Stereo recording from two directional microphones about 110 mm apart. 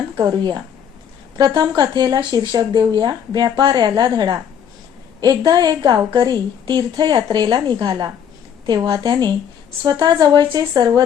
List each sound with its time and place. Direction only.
0.3 s a woman's voice: 40° right (ahead or behind)